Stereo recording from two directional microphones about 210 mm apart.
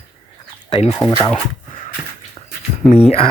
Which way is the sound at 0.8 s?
Centre (ahead or behind).